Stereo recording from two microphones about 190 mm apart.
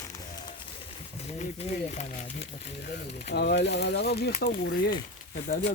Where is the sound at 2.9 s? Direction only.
60° left (ahead or behind).